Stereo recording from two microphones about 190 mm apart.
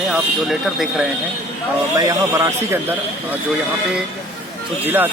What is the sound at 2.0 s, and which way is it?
Speech, 15° right (ahead or behind).